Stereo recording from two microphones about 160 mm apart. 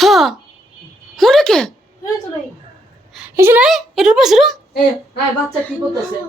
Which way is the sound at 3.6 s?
Centre (ahead or behind).